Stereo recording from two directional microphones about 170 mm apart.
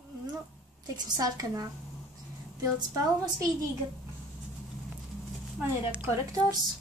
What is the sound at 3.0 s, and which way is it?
Speech, 20° right (ahead or behind).